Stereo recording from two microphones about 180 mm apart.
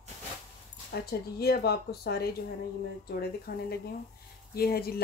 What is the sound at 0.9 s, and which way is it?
Speech, 60° left (ahead or behind).